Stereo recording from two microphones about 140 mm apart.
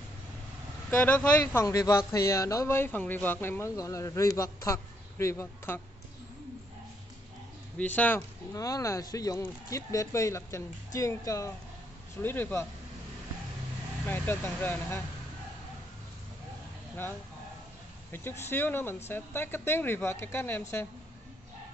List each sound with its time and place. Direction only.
0.8 s speech: 10° left (ahead or behind)
7.7 s speech: 10° left (ahead or behind)
8.5 s speech: 25° left (ahead or behind)
14.0 s speech: 15° left (ahead or behind)
18.1 s speech: 15° left (ahead or behind)